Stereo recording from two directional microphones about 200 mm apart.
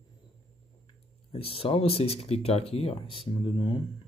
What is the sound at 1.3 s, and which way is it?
Speech, 30° left (ahead or behind).